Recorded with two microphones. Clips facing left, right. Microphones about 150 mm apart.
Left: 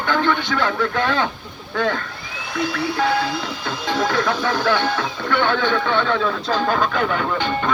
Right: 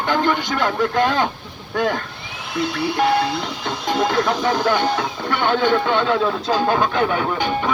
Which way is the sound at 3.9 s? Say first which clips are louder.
Right 1 dB; 25° right (ahead or behind).